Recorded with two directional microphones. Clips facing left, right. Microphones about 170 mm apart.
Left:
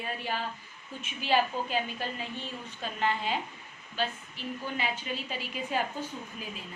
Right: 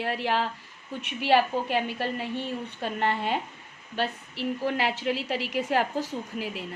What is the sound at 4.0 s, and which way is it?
A woman's voice, 80° right.